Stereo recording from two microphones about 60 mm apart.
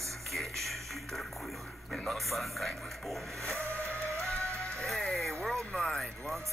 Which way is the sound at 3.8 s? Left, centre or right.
Right.